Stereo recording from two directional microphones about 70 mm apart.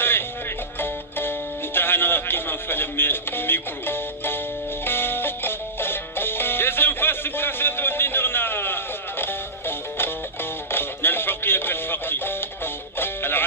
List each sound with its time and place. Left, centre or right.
0.7 s music: left